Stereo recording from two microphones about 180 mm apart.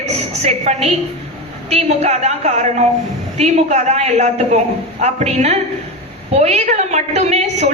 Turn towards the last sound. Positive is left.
turn(degrees=-40)  # may be behind; listen again after turning